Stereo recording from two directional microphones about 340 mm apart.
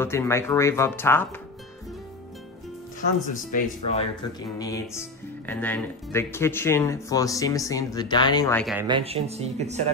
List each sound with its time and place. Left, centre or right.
0.0 s speech: centre
3.3 s speech: left
4.6 s speech: centre
8.8 s speech: centre